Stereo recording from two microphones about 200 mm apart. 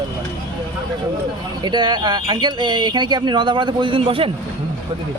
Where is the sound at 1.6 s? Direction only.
20° right (ahead or behind).